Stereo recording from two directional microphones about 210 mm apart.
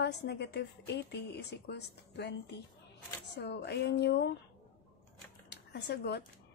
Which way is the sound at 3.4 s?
50° left (ahead or behind).